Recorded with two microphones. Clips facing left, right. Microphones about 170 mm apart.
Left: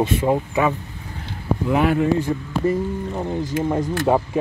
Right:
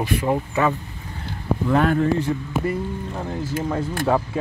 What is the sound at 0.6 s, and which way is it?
Speech, 15° left (ahead or behind).